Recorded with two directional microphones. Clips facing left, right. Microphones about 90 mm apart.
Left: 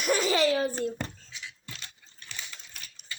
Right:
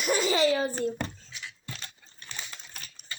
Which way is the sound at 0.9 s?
55° right (ahead or behind).